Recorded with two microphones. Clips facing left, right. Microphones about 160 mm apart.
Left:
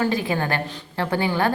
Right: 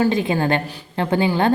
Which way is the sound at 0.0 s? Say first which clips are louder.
Right 4 dB; 20° right (ahead or behind).